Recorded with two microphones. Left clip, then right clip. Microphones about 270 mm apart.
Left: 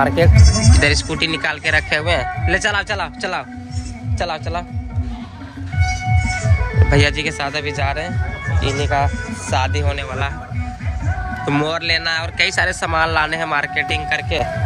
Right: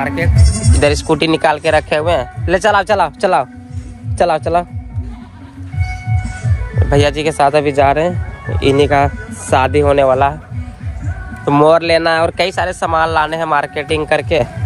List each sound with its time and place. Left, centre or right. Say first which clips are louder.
0.0 s speech: left 3 dB; centre
0.4 s a man's voice: left 3 dB; right
0.7 s a man's voice: right 7 dB; centre
6.9 s speech: right 5 dB; centre
9.6 s speech: right 13 dB; centre
11.4 s speech: right 10 dB; centre
12.4 s speech: right 2 dB; centre